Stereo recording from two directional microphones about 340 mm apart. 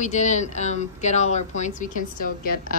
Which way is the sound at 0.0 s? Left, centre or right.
Left.